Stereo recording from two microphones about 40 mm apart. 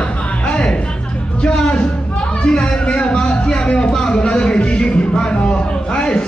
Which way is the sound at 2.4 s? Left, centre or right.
Left.